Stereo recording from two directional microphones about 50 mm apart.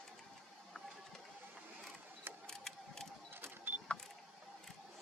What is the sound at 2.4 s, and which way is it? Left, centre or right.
Mechanisms, centre.